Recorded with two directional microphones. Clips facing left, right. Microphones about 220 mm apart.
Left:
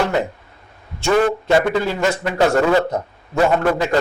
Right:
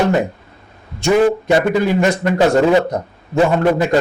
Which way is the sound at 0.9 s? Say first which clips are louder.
Right 3 dB; 15° right (ahead or behind).